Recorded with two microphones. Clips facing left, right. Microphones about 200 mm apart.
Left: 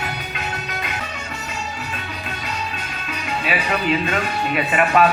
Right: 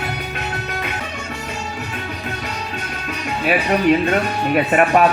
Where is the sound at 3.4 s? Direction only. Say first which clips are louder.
Right 7 dB; 55° right (ahead or behind).